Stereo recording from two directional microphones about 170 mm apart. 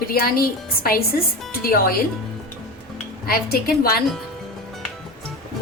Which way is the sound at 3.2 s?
65° left (ahead or behind).